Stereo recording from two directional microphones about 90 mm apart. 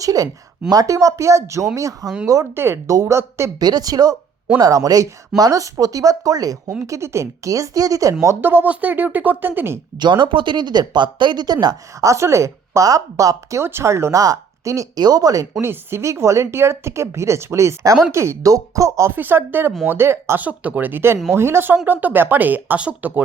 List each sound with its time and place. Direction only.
0.0 s speech: 40° right (ahead or behind)
2.6 s speech: 30° right (ahead or behind)
3.6 s speech: 45° right (ahead or behind)
8.4 s speech: 20° right (ahead or behind)
10.0 s speech: 60° right (ahead or behind); by 15.4 s 40° right (ahead or behind)
15.6 s speech: 30° right (ahead or behind)
19.1 s speech: 20° right (ahead or behind)
20.4 s speech: 15° right (ahead or behind)